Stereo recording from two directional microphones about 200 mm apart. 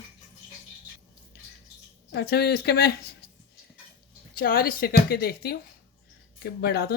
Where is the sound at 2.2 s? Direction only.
55° left (ahead or behind).